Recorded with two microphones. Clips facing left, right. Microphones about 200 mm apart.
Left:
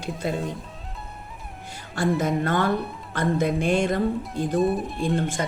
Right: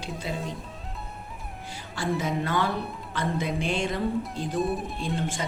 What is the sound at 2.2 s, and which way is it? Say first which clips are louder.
Speech: left 4 dB; 50° left (ahead or behind).